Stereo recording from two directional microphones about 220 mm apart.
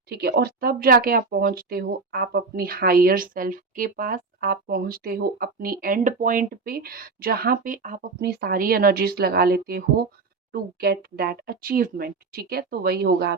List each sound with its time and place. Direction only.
0.1 s speech: 45° right (ahead or behind)